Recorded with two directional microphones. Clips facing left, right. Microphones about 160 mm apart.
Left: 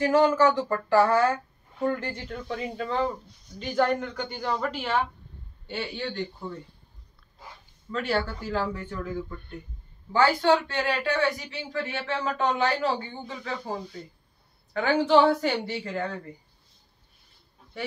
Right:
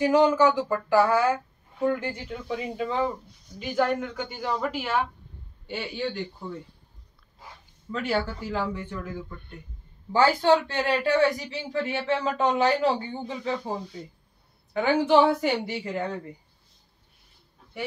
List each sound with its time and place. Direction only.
0.0 s speech: 15° right (ahead or behind)
7.9 s speech: 10° right (ahead or behind)
10.4 s speech: 25° right (ahead or behind)